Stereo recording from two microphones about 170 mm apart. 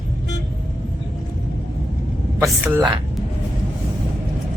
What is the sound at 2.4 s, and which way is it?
Speech, 10° right (ahead or behind).